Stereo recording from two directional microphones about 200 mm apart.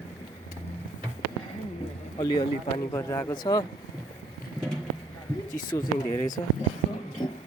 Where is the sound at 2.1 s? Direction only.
25° left (ahead or behind).